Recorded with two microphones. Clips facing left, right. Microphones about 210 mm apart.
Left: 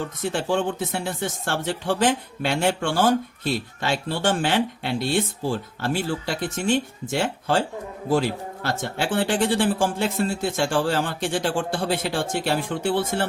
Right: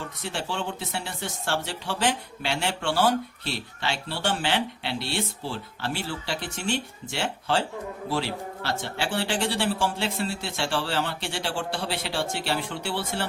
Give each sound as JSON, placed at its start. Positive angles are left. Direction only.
{"t": 0.2, "sound": "speech", "side_deg": 50}